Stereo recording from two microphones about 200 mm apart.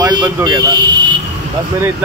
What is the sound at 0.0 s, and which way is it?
Speech, 20° right (ahead or behind).